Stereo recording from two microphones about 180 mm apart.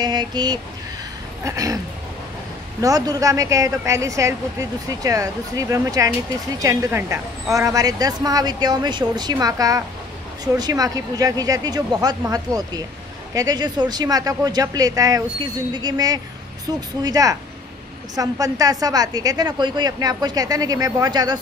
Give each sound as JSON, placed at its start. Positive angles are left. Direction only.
{"t": 0.0, "sound": "a woman's voice", "side_deg": -25}
{"t": 2.8, "sound": "a woman's voice", "side_deg": -20}